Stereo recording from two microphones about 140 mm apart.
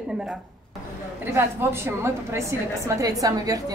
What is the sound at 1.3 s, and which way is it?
A woman's voice, 15° right (ahead or behind).